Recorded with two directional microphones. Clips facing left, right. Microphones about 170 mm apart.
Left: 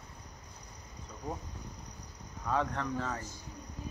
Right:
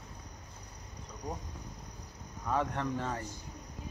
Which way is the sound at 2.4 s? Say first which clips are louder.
Even; 15° right (ahead or behind).